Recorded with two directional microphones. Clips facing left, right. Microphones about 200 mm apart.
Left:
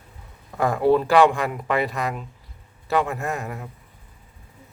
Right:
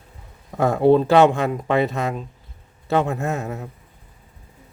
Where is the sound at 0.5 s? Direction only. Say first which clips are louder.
Right 3 dB; 25° right (ahead or behind).